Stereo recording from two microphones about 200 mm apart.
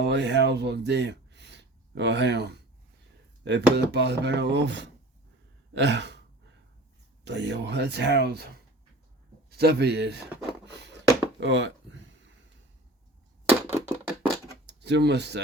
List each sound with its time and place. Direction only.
0.0 s speech: 60° right (ahead or behind)
5.7 s gasp: 60° right (ahead or behind)
7.3 s speech: 60° right (ahead or behind)
9.5 s speech: 55° right (ahead or behind)
10.7 s a sound: 60° right (ahead or behind)
13.5 s typewriter: 10° right (ahead or behind)
14.7 s speech: 60° right (ahead or behind)